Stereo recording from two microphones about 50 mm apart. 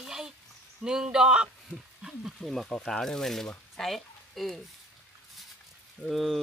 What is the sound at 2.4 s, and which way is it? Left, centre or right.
Speech, centre.